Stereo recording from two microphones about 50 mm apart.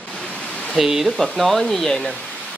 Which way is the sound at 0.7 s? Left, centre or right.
Centre.